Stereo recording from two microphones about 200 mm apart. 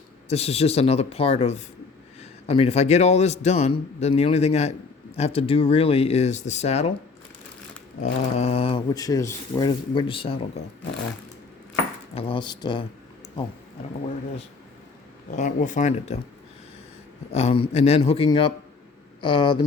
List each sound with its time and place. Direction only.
0.3 s a man's voice: 30° left (ahead or behind)
8.0 s speech: 30° left (ahead or behind)
12.1 s speech: 25° left (ahead or behind)
15.4 s a man's voice: 40° left (ahead or behind)
17.3 s speech: 30° left (ahead or behind)